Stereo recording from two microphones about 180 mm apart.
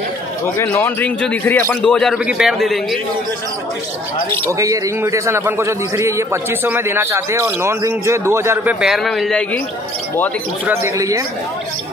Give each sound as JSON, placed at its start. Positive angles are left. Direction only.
{"t": 0.6, "sound": "a man's voice", "side_deg": 10}
{"t": 4.5, "sound": "a man's voice", "side_deg": -15}
{"t": 8.8, "sound": "a man's voice", "side_deg": 0}
{"t": 10.6, "sound": "a man's voice", "side_deg": -15}